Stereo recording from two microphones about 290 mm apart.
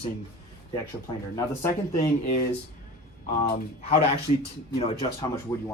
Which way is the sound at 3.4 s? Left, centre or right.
Left.